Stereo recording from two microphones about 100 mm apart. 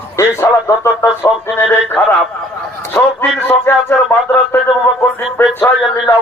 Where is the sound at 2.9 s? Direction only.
20° left (ahead or behind).